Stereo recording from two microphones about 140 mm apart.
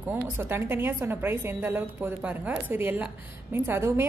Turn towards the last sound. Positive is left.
turn(degrees=-20)  # may be behind; listen again after turning